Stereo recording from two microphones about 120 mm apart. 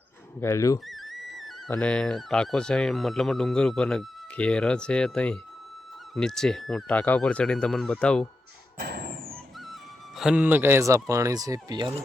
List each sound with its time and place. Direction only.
0.3 s speech: 25° left (ahead or behind)
0.9 s a sound: centre (ahead or behind)
1.7 s speech: 10° left (ahead or behind)
9.3 s music: centre (ahead or behind)
10.2 s speech: 10° right (ahead or behind); by 11.9 s 35° right (ahead or behind)